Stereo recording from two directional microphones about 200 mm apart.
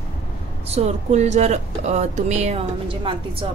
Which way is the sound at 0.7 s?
35° right (ahead or behind).